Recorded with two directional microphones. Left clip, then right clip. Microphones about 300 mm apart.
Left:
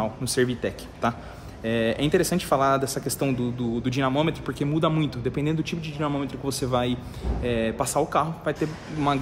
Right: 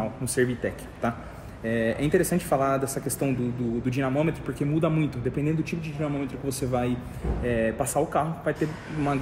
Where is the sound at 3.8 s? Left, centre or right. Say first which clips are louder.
Left 3 dB; centre.